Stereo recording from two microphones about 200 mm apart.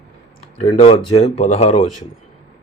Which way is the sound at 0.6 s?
30° left (ahead or behind).